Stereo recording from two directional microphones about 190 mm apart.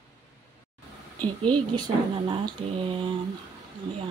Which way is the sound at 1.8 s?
25° right (ahead or behind).